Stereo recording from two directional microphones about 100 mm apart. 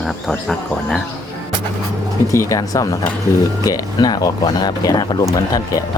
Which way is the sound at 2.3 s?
35° left (ahead or behind).